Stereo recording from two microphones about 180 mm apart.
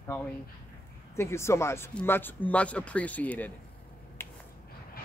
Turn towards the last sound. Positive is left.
turn(degrees=15)  # may be behind; listen again after turning